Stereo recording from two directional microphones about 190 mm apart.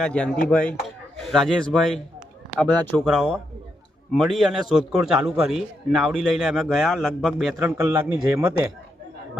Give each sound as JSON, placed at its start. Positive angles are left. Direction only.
{"t": 0.0, "sound": "a man's voice", "side_deg": 5}